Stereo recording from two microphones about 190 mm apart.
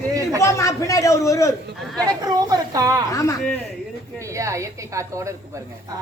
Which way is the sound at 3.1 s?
15° left (ahead or behind).